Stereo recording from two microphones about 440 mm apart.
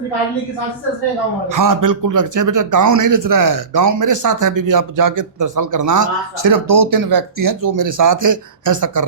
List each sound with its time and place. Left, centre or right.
1.5 s speech: right